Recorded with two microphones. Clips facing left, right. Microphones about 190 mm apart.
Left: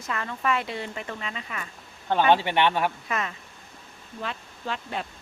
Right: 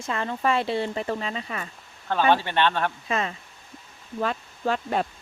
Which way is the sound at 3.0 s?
30° right (ahead or behind).